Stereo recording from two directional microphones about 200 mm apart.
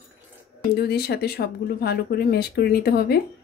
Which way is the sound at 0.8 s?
50° left (ahead or behind).